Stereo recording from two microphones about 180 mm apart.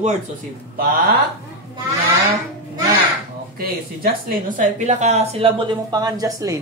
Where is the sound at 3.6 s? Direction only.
55° right (ahead or behind); by 6.6 s 20° right (ahead or behind).